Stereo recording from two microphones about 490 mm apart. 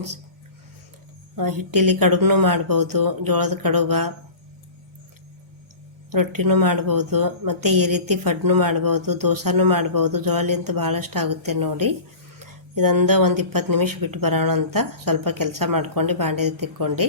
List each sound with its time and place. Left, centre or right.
1.4 s speech: right
6.1 s speech: right